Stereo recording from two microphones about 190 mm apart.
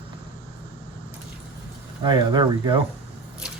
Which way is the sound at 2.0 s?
25° right (ahead or behind).